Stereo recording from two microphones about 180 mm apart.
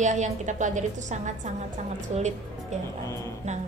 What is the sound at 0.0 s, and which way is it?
Speech, 40° right (ahead or behind).